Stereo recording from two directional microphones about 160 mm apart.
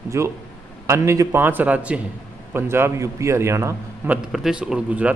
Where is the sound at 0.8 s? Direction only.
20° right (ahead or behind).